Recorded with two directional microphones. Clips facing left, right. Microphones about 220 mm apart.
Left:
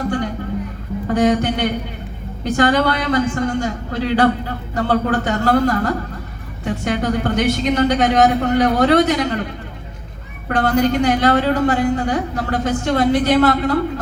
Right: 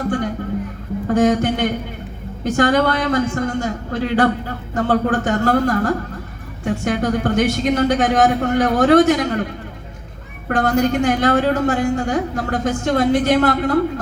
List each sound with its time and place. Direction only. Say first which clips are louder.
1.0 s a man's voice: right 1 dB; 45° right (ahead or behind)
10.5 s a man's voice: even; 45° right (ahead or behind)